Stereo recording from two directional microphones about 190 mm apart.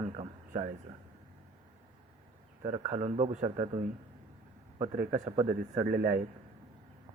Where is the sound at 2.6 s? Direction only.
25° right (ahead or behind).